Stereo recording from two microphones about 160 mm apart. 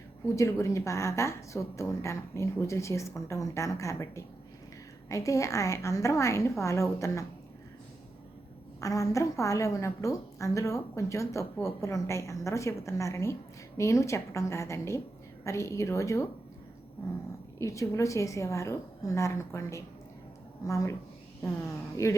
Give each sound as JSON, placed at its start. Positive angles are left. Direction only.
{"t": 0.3, "sound": "a woman's voice", "side_deg": 20}
{"t": 8.8, "sound": "a woman's voice", "side_deg": 20}
{"t": 17.6, "sound": "a woman's voice", "side_deg": 20}
{"t": 22.0, "sound": "speech", "side_deg": 15}